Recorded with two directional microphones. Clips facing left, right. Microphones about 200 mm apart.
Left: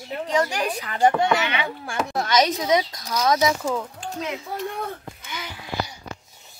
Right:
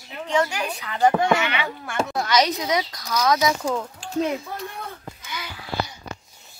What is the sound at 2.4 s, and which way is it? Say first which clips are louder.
A child's voice: left 3 dB; 25° left (ahead or behind).